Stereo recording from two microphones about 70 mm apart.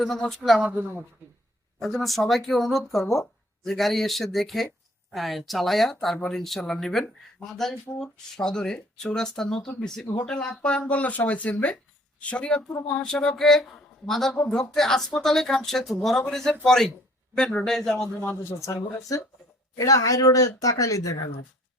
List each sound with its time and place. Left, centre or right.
0.3 s speech: centre
0.6 s speech: right
1.8 s speech: centre
18.4 s speech: left